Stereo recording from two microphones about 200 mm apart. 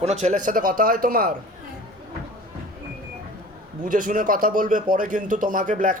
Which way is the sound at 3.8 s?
40° right (ahead or behind).